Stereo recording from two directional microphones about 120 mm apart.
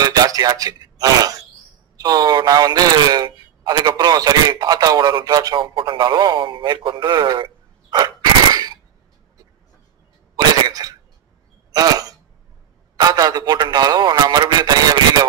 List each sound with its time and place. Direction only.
0.0 s a man's voice: 35° right (ahead or behind)
5.6 s speech: 45° right (ahead or behind)
10.3 s cough: 30° right (ahead or behind)
11.7 s a sound: 30° right (ahead or behind)
12.9 s a man's voice: 35° right (ahead or behind)